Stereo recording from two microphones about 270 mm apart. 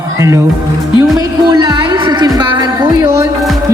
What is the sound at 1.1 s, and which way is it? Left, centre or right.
A woman's voice, centre.